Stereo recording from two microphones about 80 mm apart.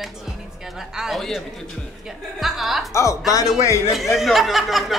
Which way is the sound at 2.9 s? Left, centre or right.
Left.